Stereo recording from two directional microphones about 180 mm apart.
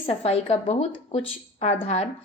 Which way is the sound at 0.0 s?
35° left (ahead or behind).